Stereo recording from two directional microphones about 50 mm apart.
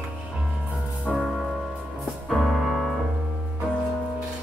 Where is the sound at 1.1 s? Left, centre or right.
Centre.